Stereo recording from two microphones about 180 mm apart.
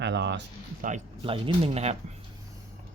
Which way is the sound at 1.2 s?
30° right (ahead or behind).